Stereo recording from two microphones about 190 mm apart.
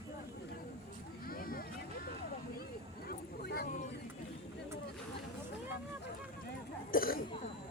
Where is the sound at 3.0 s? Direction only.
50° left (ahead or behind).